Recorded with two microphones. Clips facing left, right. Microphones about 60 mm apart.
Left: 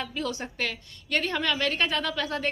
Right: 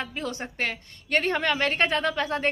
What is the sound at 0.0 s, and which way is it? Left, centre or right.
A woman's voice, right.